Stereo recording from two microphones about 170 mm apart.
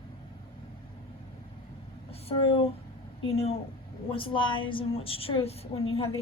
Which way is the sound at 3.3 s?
35° left (ahead or behind).